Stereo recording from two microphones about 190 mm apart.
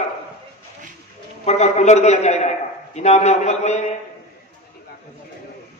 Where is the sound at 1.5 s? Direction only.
35° left (ahead or behind).